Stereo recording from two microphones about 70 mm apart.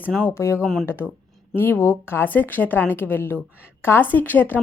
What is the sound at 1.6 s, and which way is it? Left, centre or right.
A woman's voice, left.